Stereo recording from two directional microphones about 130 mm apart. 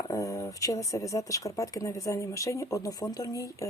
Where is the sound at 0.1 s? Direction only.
25° left (ahead or behind).